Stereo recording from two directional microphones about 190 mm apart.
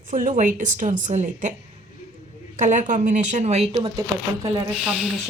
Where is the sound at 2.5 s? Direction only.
40° right (ahead or behind).